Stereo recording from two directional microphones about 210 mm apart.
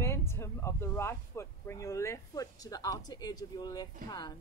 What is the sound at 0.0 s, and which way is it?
A woman's voice, 15° left (ahead or behind).